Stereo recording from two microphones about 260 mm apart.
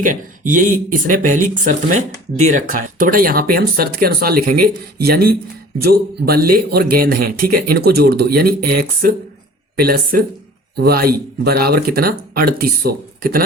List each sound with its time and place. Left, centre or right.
0.0 s speech: right